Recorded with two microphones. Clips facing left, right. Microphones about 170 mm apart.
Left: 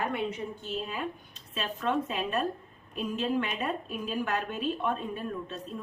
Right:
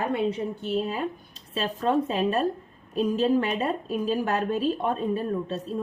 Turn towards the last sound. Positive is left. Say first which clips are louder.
# right 8 dB
turn(degrees=-35)  # may be behind; listen again after turning